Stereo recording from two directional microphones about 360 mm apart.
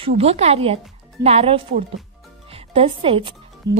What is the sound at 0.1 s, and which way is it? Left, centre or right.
Speech, centre.